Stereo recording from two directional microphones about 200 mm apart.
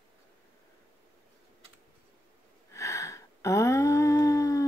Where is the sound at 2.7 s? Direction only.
15° left (ahead or behind).